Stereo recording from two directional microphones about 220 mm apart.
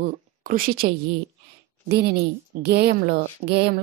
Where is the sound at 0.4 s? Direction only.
40° right (ahead or behind).